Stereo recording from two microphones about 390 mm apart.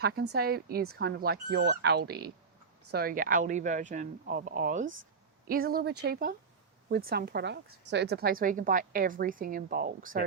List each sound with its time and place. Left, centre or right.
0.0 s speech: right